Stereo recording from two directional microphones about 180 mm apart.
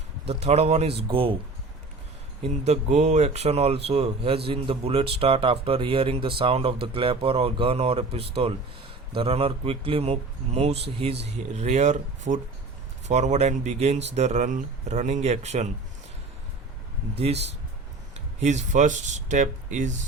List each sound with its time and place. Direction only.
0.3 s speech: 35° right (ahead or behind)
2.4 s speech: 40° right (ahead or behind)
17.2 s speech: 35° right (ahead or behind)